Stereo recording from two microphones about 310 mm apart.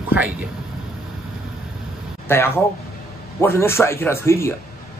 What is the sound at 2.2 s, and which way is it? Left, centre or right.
Speech, centre.